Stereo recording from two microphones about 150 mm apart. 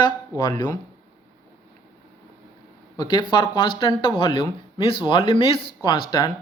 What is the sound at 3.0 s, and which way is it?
Speech, 30° left (ahead or behind).